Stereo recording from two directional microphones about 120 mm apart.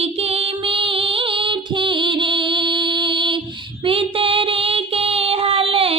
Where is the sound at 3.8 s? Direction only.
50° right (ahead or behind).